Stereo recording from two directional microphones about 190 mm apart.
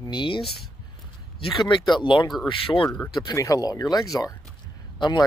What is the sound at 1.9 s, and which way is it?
Speech, 25° left (ahead or behind).